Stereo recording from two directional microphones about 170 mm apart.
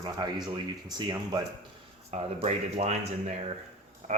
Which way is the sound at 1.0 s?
25° right (ahead or behind).